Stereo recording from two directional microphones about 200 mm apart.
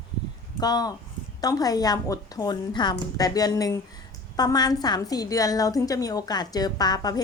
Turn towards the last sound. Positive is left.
turn(degrees=20)  # may be behind; listen again after turning